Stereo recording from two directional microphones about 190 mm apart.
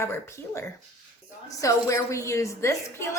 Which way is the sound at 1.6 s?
15° left (ahead or behind).